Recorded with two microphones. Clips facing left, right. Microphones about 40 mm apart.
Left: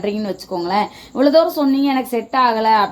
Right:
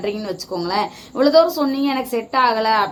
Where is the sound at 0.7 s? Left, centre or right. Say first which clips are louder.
Left 3 dB; left.